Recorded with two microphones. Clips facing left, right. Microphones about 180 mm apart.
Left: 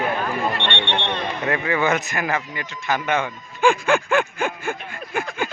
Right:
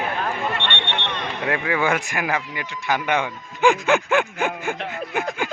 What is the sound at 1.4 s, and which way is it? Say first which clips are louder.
Speech: even; 10° right (ahead or behind).